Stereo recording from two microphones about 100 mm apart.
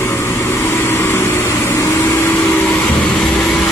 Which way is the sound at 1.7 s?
30° left (ahead or behind).